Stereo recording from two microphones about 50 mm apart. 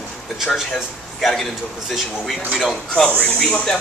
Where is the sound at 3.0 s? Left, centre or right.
Centre.